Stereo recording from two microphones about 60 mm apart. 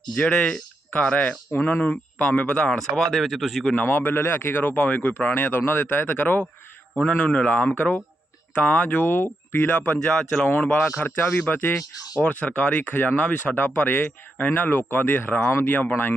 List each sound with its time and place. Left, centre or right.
0.1 s speech: centre
2.6 s speech: centre
3.8 s speech: left
5.4 s speech: left
7.3 s speech: centre
11.8 s speech: left
12.2 s speech: left